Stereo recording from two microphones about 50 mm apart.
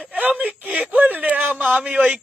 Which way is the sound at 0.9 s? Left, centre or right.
Right.